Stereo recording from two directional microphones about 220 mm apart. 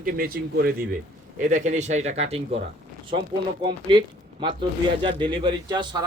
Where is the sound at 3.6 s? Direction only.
20° right (ahead or behind).